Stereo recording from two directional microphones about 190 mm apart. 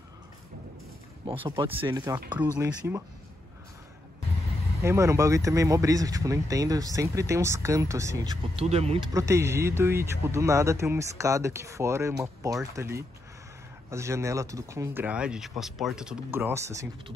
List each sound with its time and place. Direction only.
1.4 s speech: 25° right (ahead or behind)
4.8 s speech: 15° right (ahead or behind)
8.5 s speech: 35° right (ahead or behind)
9.1 s speech: 15° right (ahead or behind)